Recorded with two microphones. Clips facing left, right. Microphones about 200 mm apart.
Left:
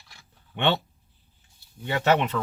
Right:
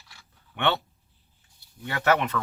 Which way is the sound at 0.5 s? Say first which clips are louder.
Left 2 dB; 20° left (ahead or behind).